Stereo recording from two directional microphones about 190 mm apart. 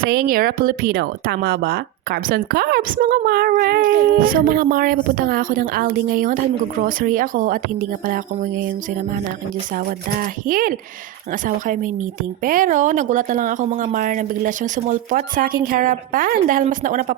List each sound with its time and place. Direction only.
0.0 s speech: 50° right (ahead or behind)